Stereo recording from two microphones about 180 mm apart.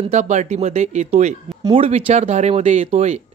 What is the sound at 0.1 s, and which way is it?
Speech, 40° right (ahead or behind).